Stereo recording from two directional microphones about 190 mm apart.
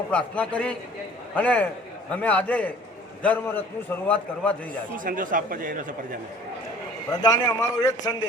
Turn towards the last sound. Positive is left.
turn(degrees=20)  # may be behind; listen again after turning